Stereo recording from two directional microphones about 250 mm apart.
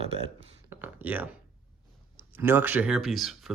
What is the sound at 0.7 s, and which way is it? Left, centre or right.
Speech, centre.